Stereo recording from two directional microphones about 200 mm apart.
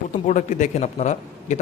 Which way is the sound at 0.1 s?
35° left (ahead or behind).